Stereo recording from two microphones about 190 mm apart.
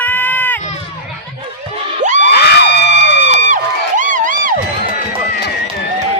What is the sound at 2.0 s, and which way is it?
Crowd, 40° right (ahead or behind).